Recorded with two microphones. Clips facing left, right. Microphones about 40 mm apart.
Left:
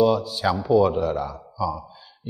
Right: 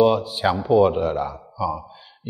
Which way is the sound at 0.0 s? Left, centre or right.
Right.